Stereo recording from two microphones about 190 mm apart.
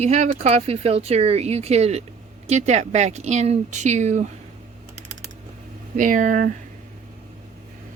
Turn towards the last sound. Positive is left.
turn(degrees=-45)  # may be behind; listen again after turning